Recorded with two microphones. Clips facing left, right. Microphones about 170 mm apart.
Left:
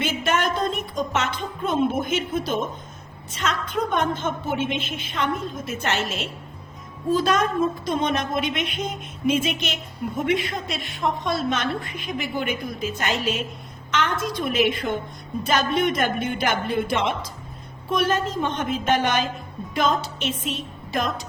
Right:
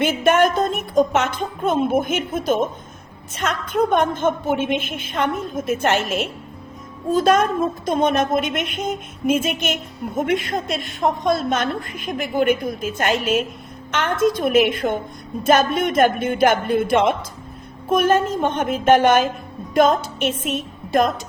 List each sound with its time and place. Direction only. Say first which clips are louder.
0.0 s a woman's voice: right 7 dB; 50° right (ahead or behind)